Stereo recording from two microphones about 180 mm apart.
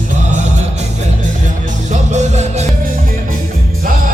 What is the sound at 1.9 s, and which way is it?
Music, 40° right (ahead or behind).